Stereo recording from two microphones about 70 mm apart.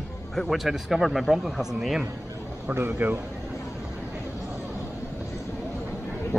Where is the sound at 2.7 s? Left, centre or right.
Right.